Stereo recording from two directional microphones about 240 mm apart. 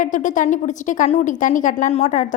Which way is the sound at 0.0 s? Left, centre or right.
Left.